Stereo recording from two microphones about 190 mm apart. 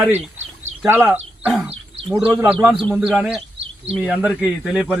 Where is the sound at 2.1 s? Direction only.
5° right (ahead or behind).